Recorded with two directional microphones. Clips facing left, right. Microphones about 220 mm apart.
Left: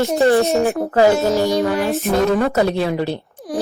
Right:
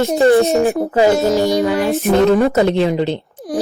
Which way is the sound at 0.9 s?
15° right (ahead or behind).